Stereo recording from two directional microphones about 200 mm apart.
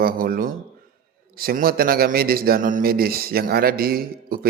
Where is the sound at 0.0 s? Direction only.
45° right (ahead or behind).